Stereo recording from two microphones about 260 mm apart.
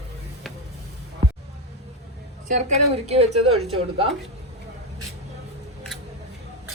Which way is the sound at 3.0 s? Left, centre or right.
Right.